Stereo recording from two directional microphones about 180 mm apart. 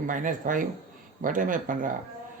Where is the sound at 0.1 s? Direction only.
45° right (ahead or behind).